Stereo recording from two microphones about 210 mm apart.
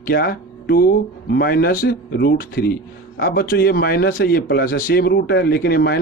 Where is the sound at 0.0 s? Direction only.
45° left (ahead or behind).